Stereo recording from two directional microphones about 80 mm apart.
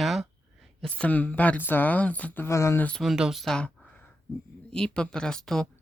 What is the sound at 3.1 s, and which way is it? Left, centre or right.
Speech, centre.